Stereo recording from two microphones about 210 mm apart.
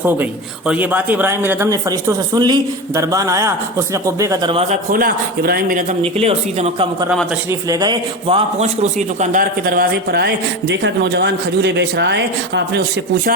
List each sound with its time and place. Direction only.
0.7 s speech: 10° right (ahead or behind)
4.5 s a man's voice: 35° right (ahead or behind)
6.0 s speech: 30° right (ahead or behind)
7.7 s a man's voice: 20° right (ahead or behind); by 12.8 s 55° right (ahead or behind)